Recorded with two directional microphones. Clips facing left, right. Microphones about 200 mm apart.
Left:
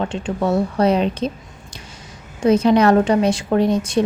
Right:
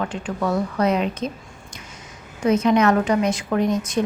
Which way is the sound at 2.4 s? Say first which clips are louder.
Left 3 dB; 30° left (ahead or behind).